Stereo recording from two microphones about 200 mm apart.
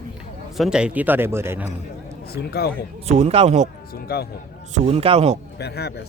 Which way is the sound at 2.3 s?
50° left (ahead or behind).